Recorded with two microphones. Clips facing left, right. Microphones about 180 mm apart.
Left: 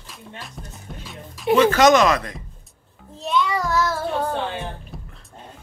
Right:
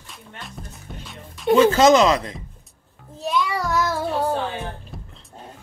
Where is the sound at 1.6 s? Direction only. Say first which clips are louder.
Even; 25° right (ahead or behind).